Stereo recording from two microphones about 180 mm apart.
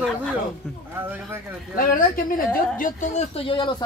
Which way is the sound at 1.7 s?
50° left (ahead or behind).